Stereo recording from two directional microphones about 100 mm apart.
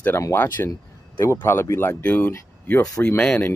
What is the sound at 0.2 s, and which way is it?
Speech, 25° left (ahead or behind).